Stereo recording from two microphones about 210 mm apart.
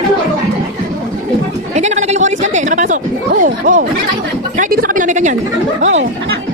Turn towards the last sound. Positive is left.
turn(degrees=-35)  # may be behind; listen again after turning